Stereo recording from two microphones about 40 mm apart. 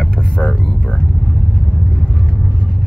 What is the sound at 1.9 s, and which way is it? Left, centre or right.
Vehicle, left.